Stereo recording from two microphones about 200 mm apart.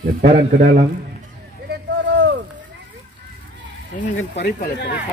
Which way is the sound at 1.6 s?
60° right (ahead or behind).